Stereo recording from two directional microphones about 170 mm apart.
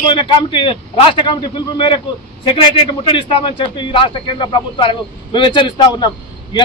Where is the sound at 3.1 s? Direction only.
30° left (ahead or behind).